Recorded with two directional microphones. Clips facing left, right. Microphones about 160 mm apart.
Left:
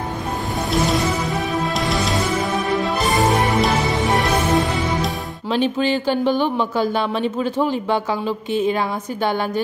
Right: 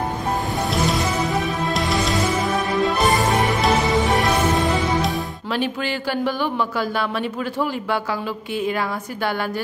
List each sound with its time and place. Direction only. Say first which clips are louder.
1.8 s music: even; centre (ahead or behind)
5.5 s speech: left 6 dB; 20° left (ahead or behind)